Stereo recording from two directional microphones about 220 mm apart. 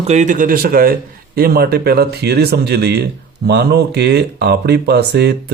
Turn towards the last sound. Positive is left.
turn(degrees=-50)  # may be behind; listen again after turning